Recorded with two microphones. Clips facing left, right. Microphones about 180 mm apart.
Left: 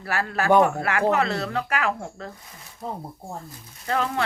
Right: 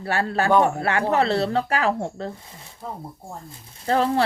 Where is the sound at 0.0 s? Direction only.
30° right (ahead or behind).